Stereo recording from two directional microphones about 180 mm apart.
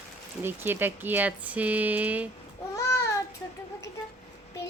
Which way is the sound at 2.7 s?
15° left (ahead or behind).